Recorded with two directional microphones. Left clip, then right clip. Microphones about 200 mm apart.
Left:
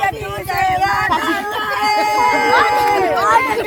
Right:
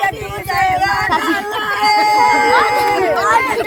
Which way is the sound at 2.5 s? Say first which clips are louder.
Even; 40° right (ahead or behind).